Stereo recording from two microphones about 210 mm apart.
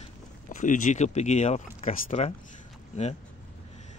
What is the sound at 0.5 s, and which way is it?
Speech, 35° left (ahead or behind).